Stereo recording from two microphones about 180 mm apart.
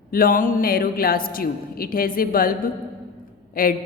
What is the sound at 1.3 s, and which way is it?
A woman's voice, 55° left (ahead or behind).